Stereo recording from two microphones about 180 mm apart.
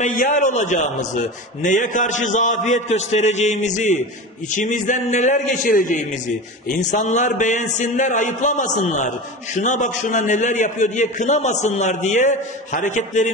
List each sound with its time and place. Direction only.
0.2 s a man's voice: 45° left (ahead or behind)